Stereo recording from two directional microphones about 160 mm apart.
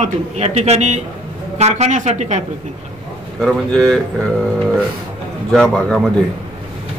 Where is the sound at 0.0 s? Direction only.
40° right (ahead or behind).